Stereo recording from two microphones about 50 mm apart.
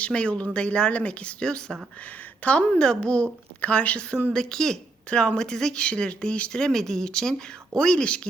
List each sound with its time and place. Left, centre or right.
0.0 s a woman's voice: left
2.4 s a woman's voice: left
4.3 s speech: centre